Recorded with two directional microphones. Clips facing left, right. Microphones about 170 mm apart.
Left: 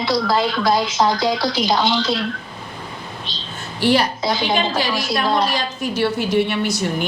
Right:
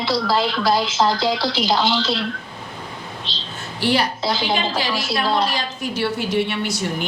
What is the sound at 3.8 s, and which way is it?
Speech, 50° left (ahead or behind).